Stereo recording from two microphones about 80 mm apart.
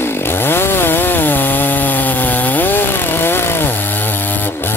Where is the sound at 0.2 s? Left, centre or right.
Left.